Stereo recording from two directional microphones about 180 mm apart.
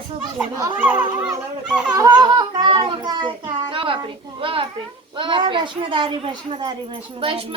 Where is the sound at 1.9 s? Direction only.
20° right (ahead or behind).